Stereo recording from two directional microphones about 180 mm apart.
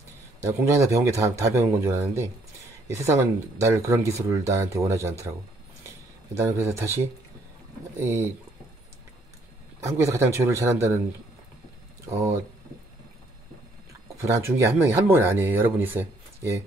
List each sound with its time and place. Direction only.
0.4 s speech: 15° right (ahead or behind)
6.4 s speech: 15° right (ahead or behind)
8.0 s speech: 15° right (ahead or behind)
9.8 s speech: 15° right (ahead or behind)
14.4 s speech: 15° right (ahead or behind)